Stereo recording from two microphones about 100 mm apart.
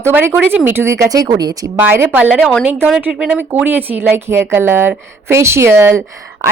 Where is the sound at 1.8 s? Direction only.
25° right (ahead or behind).